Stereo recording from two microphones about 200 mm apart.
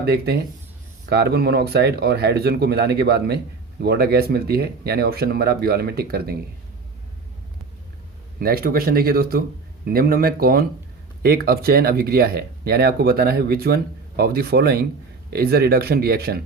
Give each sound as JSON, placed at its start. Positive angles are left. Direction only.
{"t": 0.0, "sound": "speech", "side_deg": -50}
{"t": 8.4, "sound": "speech", "side_deg": -50}